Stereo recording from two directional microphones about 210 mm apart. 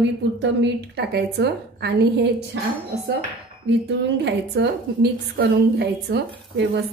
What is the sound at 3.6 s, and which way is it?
A woman's voice, 55° right (ahead or behind).